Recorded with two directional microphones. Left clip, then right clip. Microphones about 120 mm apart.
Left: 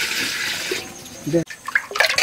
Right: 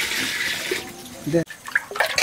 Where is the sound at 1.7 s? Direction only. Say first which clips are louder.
Left 4 dB; 10° left (ahead or behind).